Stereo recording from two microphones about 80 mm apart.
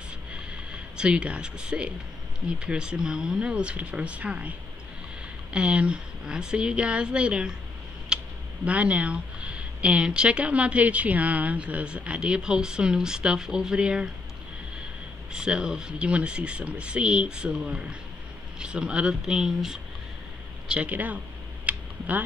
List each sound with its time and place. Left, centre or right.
0.3 s a sound: centre
2.4 s speech: centre
8.1 s a sound: centre
8.6 s speech: centre
15.3 s speech: centre
21.6 s tick: centre